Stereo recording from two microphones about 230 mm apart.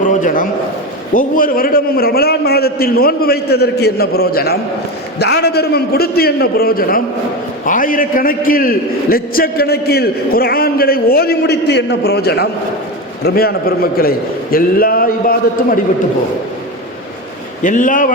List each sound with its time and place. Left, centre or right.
0.2 s a sound: left
1.1 s a man's voice: left
17.6 s a man's voice: left